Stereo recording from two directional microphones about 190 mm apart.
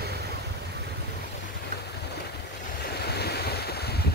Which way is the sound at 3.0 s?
60° left (ahead or behind).